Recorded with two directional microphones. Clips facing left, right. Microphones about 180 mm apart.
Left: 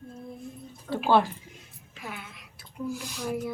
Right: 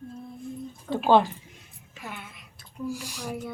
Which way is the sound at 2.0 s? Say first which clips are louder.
Even; centre (ahead or behind).